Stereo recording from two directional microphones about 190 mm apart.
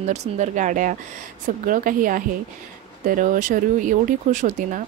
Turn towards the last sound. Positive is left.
turn(degrees=-40)  # may be behind; listen again after turning